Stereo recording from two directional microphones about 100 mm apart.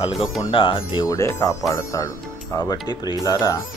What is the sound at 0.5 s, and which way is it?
Speech, 60° left (ahead or behind).